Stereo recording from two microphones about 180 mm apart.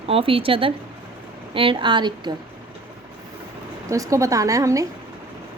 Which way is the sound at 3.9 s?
20° right (ahead or behind).